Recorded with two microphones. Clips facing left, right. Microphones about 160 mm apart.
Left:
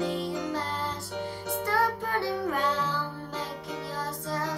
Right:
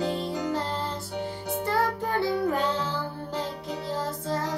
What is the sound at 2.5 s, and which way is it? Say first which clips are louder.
Music: right 2 dB; 25° right (ahead or behind).